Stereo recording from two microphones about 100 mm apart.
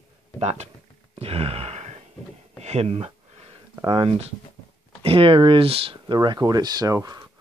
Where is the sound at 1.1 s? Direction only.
85° right.